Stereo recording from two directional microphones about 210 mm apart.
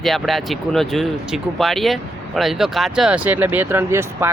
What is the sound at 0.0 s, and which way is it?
Speech, centre (ahead or behind).